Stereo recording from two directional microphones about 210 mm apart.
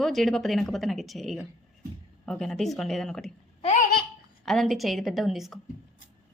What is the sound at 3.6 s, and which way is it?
Baby laughter, 35° left (ahead or behind).